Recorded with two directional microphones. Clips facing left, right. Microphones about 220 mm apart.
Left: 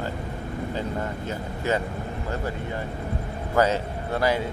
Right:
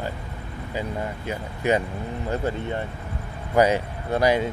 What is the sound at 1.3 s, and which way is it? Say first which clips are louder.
Speech: right 4 dB; 15° right (ahead or behind).